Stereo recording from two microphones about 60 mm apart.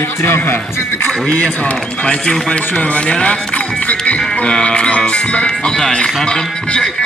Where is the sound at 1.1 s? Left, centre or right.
Centre.